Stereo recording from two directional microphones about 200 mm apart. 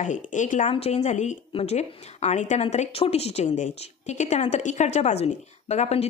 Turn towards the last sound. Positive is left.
turn(degrees=30)  # may be behind; listen again after turning